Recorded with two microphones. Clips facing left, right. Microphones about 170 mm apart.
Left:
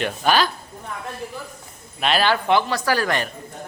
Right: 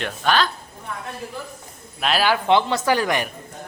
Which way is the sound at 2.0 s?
Centre (ahead or behind).